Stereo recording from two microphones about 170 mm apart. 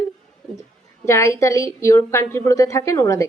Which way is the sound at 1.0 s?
15° left (ahead or behind).